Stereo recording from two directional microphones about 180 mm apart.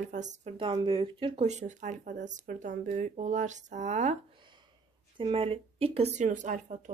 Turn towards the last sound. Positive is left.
turn(degrees=-45)  # may be behind; listen again after turning